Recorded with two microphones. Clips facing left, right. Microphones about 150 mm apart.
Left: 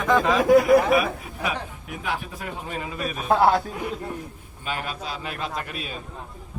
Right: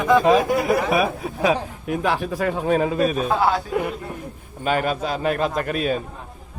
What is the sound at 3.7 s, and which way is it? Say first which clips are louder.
A man's voice: right 5 dB; 60° right (ahead or behind).